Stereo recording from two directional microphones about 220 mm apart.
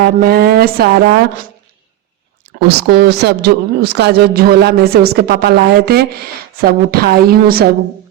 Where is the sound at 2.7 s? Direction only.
45° right (ahead or behind).